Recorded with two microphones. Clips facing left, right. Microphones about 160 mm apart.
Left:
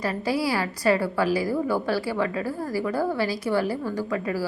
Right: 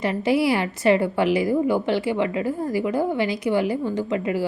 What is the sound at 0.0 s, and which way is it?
A woman's voice, 20° right (ahead or behind).